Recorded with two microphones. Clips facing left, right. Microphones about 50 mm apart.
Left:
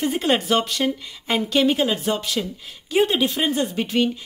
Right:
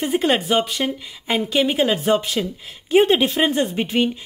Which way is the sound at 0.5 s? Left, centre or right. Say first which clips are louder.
Right 1 dB; centre.